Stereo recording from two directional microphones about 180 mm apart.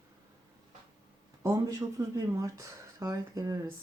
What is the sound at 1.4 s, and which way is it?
Speech, 15° right (ahead or behind).